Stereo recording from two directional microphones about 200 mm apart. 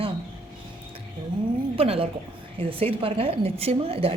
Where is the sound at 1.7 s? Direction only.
30° right (ahead or behind).